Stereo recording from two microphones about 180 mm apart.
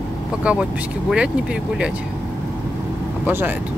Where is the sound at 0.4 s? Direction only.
5° right (ahead or behind).